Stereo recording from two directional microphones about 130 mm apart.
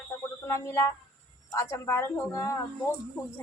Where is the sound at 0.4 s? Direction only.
25° left (ahead or behind).